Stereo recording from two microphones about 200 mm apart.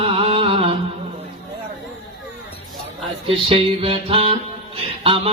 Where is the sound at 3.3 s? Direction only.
30° right (ahead or behind).